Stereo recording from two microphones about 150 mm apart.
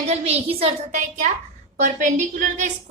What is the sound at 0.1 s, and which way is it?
A woman's voice, 45° right (ahead or behind).